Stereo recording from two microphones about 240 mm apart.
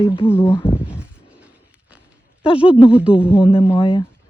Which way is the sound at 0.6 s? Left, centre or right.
Centre.